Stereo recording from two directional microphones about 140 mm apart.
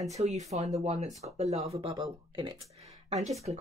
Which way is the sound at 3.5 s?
50° right (ahead or behind).